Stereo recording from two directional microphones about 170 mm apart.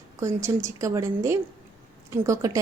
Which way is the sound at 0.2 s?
15° right (ahead or behind).